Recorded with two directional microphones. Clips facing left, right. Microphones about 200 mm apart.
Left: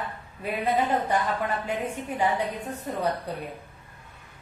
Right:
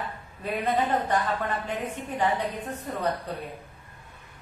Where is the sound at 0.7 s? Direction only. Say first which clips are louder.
Left 1 dB; 10° left (ahead or behind).